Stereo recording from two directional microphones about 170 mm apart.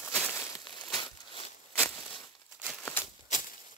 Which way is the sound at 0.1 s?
5° left (ahead or behind).